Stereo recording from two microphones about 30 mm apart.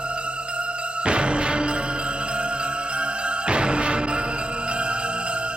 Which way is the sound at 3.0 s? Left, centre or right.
Right.